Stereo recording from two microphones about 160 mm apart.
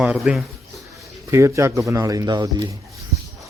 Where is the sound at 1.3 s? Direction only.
15° right (ahead or behind).